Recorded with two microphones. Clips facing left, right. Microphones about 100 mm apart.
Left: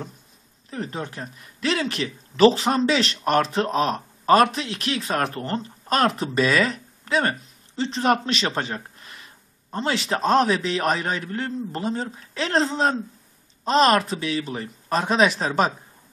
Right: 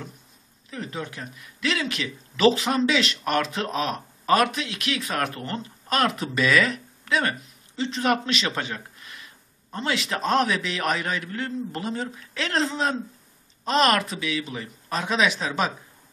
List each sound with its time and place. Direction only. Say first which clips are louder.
0.7 s speech: left 3 dB; 35° left (ahead or behind)